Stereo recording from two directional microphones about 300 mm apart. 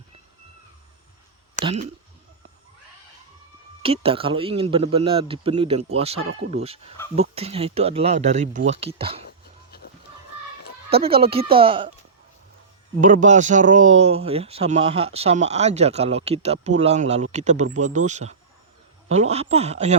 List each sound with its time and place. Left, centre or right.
3.8 s speech: centre
10.8 s speech: centre
13.0 s speech: right